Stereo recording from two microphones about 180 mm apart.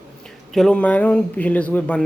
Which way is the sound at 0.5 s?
5° left (ahead or behind).